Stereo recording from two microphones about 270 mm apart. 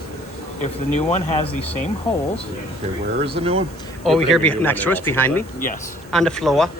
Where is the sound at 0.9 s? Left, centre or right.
Left.